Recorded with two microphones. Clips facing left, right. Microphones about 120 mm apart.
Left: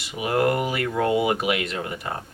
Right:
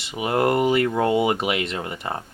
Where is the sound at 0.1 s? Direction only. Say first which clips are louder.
Right 1 dB; 25° right (ahead or behind).